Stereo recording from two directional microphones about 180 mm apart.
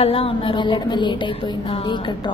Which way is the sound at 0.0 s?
30° left (ahead or behind).